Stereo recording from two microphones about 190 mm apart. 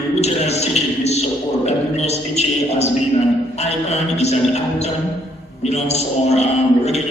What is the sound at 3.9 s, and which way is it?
Music, 35° left (ahead or behind).